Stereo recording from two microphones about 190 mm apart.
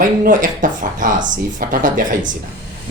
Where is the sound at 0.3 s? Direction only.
45° right (ahead or behind).